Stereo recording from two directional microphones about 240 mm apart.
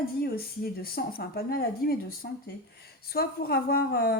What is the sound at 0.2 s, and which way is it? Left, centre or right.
Speech, left.